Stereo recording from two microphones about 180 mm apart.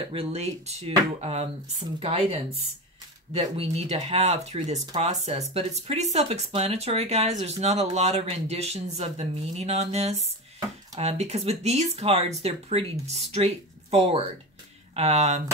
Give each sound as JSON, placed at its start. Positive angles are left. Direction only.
{"t": 0.0, "sound": "speech", "side_deg": -30}